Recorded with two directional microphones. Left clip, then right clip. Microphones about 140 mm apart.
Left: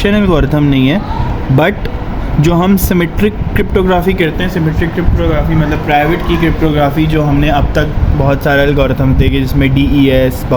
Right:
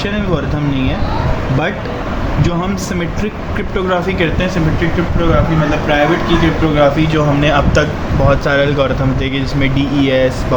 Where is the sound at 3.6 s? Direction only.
60° left (ahead or behind).